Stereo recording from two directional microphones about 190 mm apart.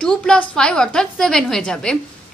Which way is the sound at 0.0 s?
5° left (ahead or behind).